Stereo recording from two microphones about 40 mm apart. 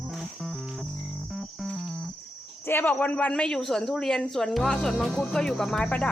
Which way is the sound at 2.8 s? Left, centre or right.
Left.